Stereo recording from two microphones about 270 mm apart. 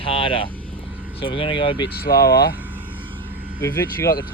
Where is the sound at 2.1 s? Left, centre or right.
Left.